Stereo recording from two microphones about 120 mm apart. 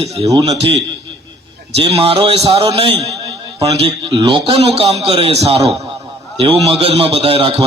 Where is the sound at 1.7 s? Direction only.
55° right (ahead or behind).